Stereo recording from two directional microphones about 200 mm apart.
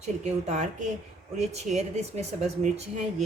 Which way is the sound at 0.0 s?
35° right (ahead or behind).